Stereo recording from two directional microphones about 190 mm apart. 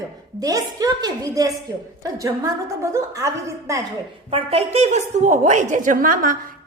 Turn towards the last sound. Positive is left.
turn(degrees=-45)  # may be behind; listen again after turning